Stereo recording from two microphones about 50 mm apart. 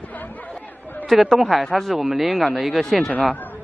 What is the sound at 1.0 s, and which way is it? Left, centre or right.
Speech, centre.